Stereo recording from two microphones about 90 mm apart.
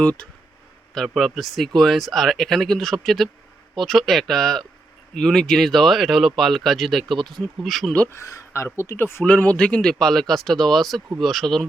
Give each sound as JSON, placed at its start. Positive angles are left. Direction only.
{"t": 0.0, "sound": "speech", "side_deg": 10}
{"t": 0.9, "sound": "speech", "side_deg": 0}
{"t": 8.1, "sound": "speech", "side_deg": 35}
{"t": 9.2, "sound": "speech", "side_deg": 15}